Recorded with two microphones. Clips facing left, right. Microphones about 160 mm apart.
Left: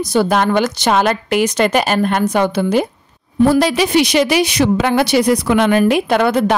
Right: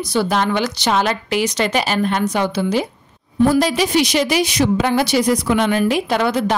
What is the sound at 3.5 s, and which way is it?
A woman's voice, 70° left (ahead or behind).